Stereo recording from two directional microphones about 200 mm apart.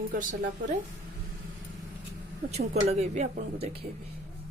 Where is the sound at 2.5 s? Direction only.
35° right (ahead or behind).